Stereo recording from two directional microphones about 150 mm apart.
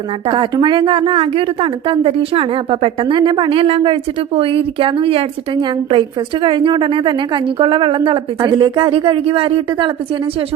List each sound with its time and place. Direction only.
0.3 s a woman's voice: 30° right (ahead or behind)